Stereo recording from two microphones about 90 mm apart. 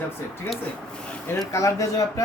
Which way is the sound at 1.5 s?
35° left (ahead or behind).